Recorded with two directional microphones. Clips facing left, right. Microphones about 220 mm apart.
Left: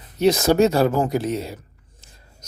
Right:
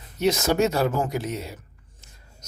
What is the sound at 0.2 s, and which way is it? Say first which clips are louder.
Speech: left 5 dB; 35° left (ahead or behind).